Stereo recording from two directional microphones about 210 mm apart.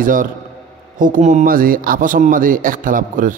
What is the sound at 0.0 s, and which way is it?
A man's voice, 40° right (ahead or behind).